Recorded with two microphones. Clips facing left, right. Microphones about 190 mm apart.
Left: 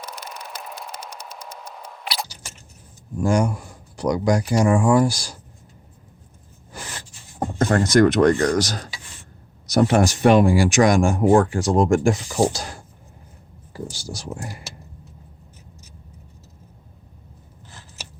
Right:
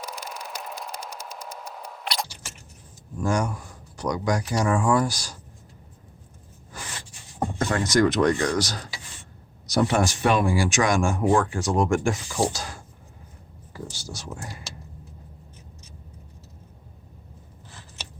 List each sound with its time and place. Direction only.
0.0 s a sound: centre (ahead or behind)
3.2 s speech: 30° left (ahead or behind)
7.6 s speech: 50° left (ahead or behind); by 12.6 s 35° left (ahead or behind)
13.7 s speech: 35° left (ahead or behind)